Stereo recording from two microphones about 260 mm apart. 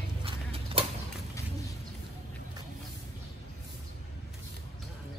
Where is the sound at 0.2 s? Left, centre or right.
Right.